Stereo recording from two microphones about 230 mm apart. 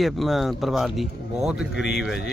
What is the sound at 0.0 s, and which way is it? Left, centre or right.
Speech, centre.